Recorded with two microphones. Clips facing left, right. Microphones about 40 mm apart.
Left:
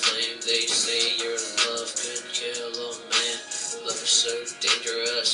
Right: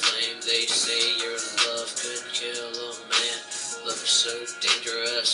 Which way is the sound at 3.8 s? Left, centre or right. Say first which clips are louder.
Even; centre.